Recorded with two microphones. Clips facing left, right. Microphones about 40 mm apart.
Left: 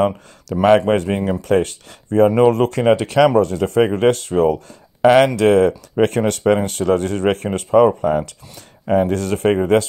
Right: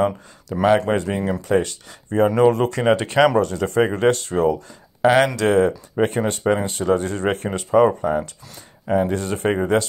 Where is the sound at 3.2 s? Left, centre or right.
Centre.